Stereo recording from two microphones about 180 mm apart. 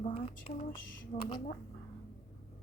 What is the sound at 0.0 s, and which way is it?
Speech, 35° left (ahead or behind).